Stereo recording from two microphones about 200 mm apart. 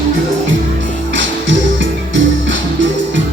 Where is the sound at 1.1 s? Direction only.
65° right (ahead or behind).